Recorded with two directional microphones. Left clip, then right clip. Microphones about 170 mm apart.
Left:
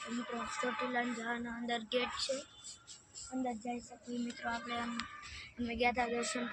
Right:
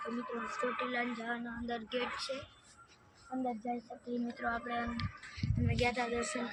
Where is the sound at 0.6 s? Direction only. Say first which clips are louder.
Right 1 dB; 65° left (ahead or behind); by 2.3 s 45° left (ahead or behind).